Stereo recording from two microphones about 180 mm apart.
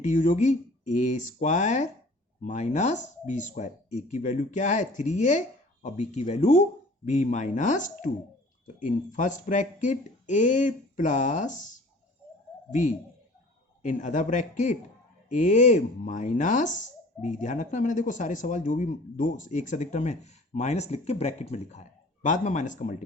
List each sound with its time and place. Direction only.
0.0 s speech: 45° left (ahead or behind)
13.8 s speech: 45° left (ahead or behind)